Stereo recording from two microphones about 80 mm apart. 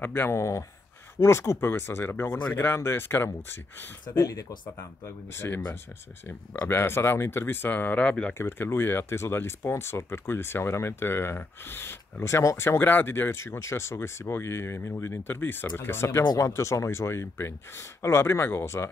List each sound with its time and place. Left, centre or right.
0.0 s speech: left
4.1 s speech: left; by 8.4 s centre
8.4 s speech: left